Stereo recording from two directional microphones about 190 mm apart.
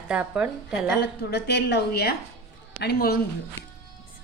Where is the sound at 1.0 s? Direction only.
60° left (ahead or behind).